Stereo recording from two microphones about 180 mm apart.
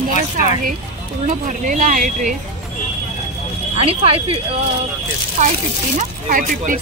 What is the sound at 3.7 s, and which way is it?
Speech, 30° right (ahead or behind).